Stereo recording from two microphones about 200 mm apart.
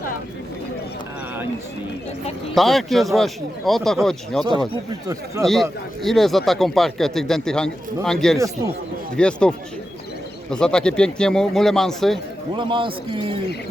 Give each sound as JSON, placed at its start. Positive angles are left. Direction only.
{"t": 2.6, "sound": "a man's voice", "side_deg": 0}
{"t": 4.7, "sound": "speech", "side_deg": -15}
{"t": 6.0, "sound": "a man's voice", "side_deg": 0}
{"t": 12.5, "sound": "a man's voice", "side_deg": -25}